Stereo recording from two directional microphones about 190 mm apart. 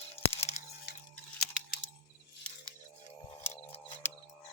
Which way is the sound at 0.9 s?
65° left (ahead or behind).